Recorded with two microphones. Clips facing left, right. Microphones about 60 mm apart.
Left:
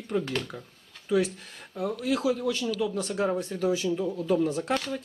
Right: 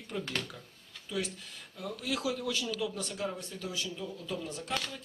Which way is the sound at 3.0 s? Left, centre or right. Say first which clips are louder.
Left 9 dB; left.